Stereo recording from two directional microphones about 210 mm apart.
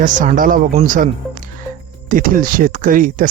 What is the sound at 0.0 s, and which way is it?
Speech, 40° right (ahead or behind).